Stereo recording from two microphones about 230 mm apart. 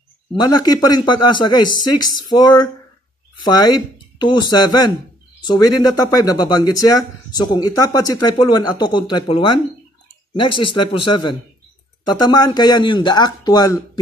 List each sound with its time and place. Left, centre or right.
0.4 s speech: centre